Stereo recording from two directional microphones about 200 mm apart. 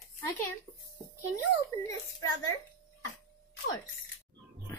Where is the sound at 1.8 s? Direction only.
15° left (ahead or behind).